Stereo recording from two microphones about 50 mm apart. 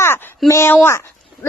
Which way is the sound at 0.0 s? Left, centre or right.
Left.